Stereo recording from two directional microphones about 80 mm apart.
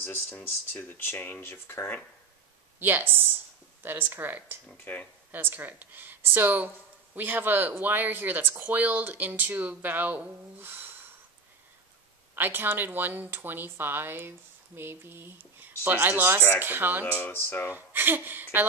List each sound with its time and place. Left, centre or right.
0.0 s speech: left
2.8 s speech: right
4.9 s speech: left
5.3 s speech: right
12.4 s speech: right
17.0 s speech: left
17.7 s speech: right